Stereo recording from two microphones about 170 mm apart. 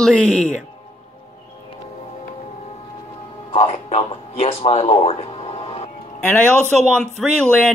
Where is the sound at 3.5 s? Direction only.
40° left (ahead or behind).